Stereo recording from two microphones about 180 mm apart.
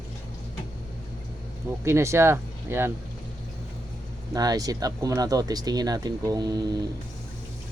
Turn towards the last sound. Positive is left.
turn(degrees=-20)  # may be behind; listen again after turning